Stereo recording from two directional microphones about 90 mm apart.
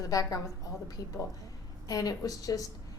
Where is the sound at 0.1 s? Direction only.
40° left (ahead or behind).